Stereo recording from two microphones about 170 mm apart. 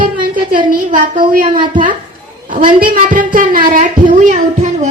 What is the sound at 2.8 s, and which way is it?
A woman's voice, 55° right (ahead or behind).